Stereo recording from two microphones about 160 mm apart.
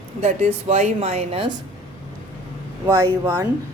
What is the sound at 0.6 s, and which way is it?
Speech, 40° right (ahead or behind).